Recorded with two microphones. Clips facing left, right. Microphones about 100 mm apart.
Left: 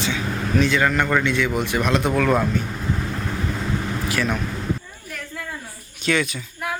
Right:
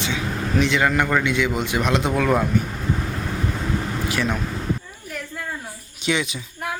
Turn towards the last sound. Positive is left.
turn(degrees=-15)  # may be behind; listen again after turning